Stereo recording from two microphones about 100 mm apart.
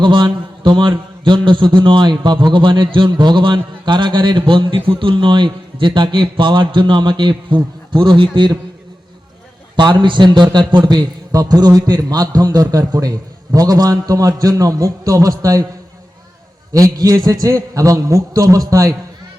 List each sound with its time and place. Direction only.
0.0 s a man's voice: 55° right (ahead or behind)
9.7 s a man's voice: 50° right (ahead or behind); by 15.6 s 35° right (ahead or behind)
16.7 s a man's voice: 35° right (ahead or behind)